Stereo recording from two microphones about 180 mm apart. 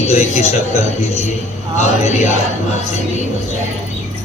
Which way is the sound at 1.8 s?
40° left (ahead or behind).